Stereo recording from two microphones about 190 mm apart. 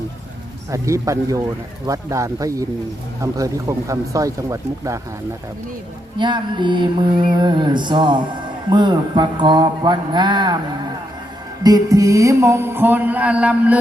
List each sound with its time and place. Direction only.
0.7 s music: 15° right (ahead or behind)
6.1 s speech: 25° right (ahead or behind)
11.6 s music: 20° right (ahead or behind)